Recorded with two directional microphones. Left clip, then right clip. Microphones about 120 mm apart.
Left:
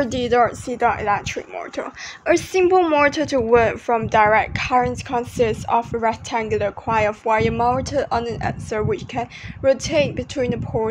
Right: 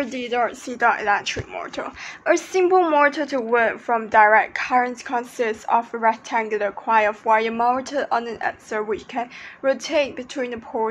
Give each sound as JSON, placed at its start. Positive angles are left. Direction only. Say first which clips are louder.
{"t": 0.1, "sound": "speech", "louder": "left 6 dB", "side_deg": 65}
{"t": 0.7, "sound": "a woman's voice", "louder": "right 1 dB", "side_deg": 30}